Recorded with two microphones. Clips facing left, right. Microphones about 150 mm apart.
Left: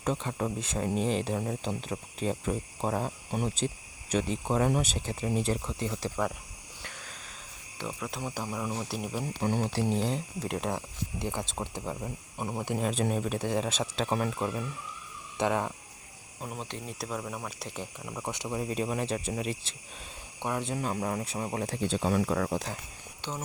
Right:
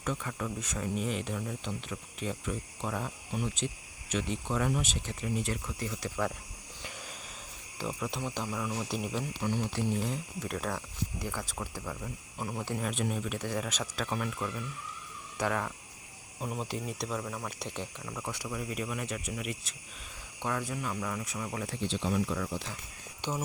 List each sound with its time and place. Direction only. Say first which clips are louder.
0.0 s speech: left 4 dB; 30° left (ahead or behind)
7.8 s speech: right 1 dB; centre (ahead or behind)
8.4 s speech: left 1 dB; 20° left (ahead or behind)
8.8 s speech: even; 5° left (ahead or behind)
9.2 s speech: left 3 dB; 45° left (ahead or behind)
9.9 s speech: left 3 dB; 30° left (ahead or behind)
12.9 s speech: left 4 dB; 35° left (ahead or behind)
16.4 s speech: right 3 dB; centre (ahead or behind)
17.1 s speech: even; 5° left (ahead or behind)
18.0 s speech: left 2 dB; 20° left (ahead or behind)
20.4 s speech: left 2 dB; 20° left (ahead or behind)
20.7 s speech: left 4 dB; 40° left (ahead or behind)
23.2 s speech: right 3 dB; 15° right (ahead or behind)